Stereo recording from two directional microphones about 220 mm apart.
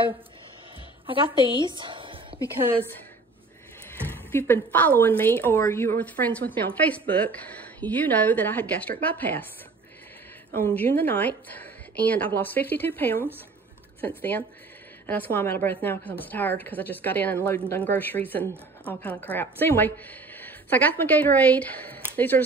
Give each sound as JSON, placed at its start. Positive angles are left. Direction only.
{"t": 1.0, "sound": "a sound", "side_deg": -25}
{"t": 4.3, "sound": "a woman's voice", "side_deg": 10}
{"t": 10.6, "sound": "a woman's voice", "side_deg": 10}